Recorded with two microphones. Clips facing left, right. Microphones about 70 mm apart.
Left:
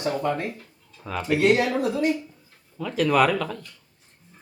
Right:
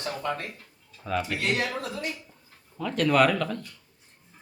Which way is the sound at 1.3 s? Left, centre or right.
Left.